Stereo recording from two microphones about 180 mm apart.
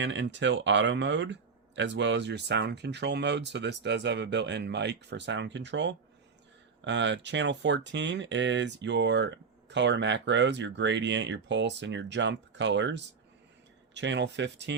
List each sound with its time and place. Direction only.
0.0 s speech: 80° right